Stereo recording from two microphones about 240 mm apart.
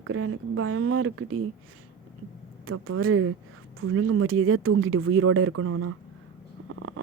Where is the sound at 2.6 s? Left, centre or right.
Right.